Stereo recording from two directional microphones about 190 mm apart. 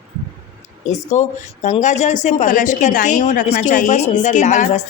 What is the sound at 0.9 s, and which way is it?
Speech, 35° left (ahead or behind).